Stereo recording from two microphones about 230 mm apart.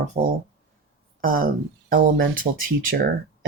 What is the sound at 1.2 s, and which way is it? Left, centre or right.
Speech, right.